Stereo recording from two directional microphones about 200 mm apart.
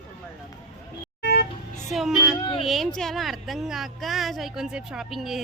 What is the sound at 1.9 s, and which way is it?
Speech, centre (ahead or behind).